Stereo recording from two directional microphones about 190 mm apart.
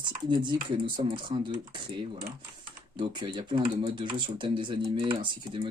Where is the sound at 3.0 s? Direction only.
25° right (ahead or behind).